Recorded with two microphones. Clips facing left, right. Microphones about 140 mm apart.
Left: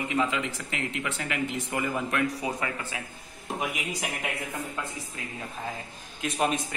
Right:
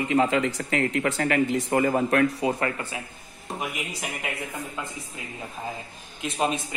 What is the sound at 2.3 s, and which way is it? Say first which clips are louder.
Speech: right 6 dB; 55° right (ahead or behind).